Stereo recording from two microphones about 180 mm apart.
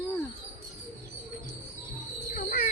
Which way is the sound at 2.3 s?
55° left (ahead or behind).